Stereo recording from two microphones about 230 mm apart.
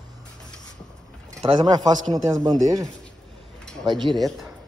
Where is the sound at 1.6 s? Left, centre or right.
Centre.